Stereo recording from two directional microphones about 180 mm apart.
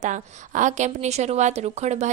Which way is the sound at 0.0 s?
45° right (ahead or behind).